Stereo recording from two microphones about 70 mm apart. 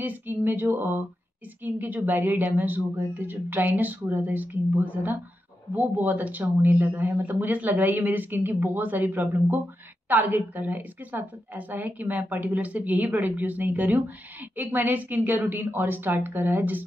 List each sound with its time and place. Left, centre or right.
0.0 s a woman's voice: right